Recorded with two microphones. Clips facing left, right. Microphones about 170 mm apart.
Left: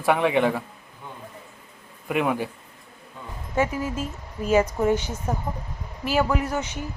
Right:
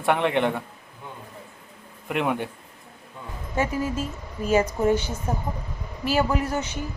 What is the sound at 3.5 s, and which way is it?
Speech, 20° left (ahead or behind).